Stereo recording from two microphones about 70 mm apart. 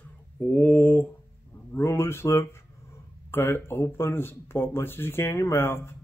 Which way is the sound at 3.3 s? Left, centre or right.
Left.